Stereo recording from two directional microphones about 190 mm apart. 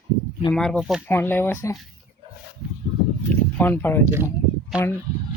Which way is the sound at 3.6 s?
10° left (ahead or behind).